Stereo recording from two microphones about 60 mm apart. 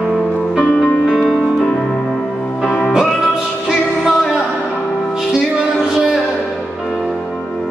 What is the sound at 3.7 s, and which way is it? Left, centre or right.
Music, centre.